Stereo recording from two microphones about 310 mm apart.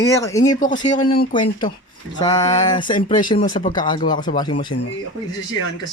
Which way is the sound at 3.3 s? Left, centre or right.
Left.